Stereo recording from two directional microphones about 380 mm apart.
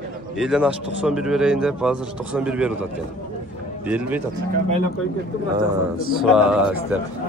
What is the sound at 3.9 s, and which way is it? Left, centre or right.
Speech, centre.